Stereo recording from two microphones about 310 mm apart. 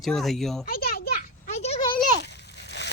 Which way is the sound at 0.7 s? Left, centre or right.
Left.